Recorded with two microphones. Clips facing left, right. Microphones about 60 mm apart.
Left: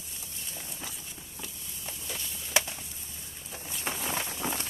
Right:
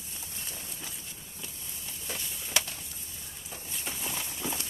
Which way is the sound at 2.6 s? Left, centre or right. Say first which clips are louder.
Left 3 dB; left.